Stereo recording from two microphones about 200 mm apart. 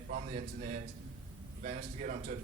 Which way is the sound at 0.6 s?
40° right (ahead or behind).